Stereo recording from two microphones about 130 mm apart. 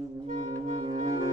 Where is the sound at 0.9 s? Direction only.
30° right (ahead or behind).